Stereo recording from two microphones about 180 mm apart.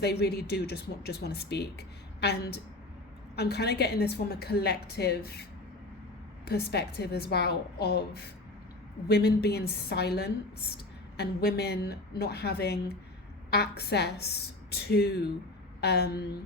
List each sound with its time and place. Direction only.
0.0 s a woman's voice: 65° left (ahead or behind)
6.4 s a woman's voice: 65° left (ahead or behind)